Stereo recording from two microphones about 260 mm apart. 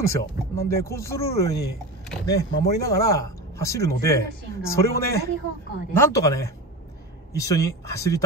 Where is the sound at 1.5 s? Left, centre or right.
Left.